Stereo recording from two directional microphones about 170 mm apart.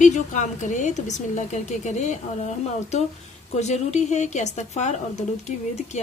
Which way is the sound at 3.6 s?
40° left (ahead or behind).